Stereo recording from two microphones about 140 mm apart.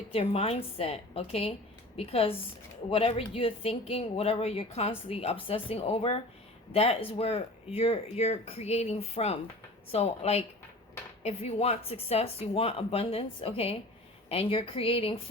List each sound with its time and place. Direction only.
0.1 s speech: 40° left (ahead or behind)